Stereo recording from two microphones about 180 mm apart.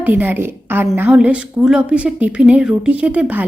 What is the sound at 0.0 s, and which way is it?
A woman's voice, 10° right (ahead or behind).